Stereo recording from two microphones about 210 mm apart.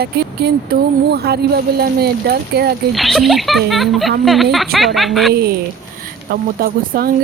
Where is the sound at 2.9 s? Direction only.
Centre (ahead or behind).